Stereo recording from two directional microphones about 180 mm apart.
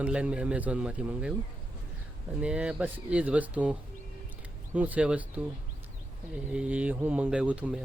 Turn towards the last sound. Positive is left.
turn(degrees=-5)  # may be behind; listen again after turning